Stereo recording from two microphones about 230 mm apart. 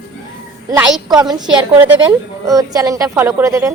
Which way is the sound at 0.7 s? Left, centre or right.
Centre.